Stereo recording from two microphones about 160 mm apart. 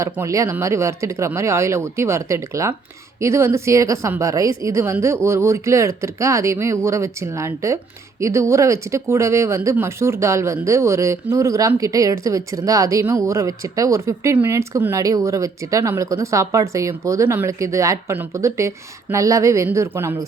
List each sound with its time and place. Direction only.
0.0 s speech: 20° right (ahead or behind)